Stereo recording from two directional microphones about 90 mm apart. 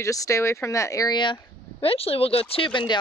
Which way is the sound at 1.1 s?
60° left (ahead or behind).